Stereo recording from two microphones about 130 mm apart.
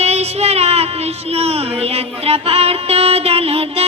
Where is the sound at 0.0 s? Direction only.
55° right (ahead or behind).